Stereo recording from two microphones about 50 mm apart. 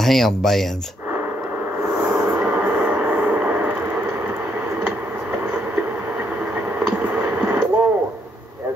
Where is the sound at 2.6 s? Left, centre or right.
Right.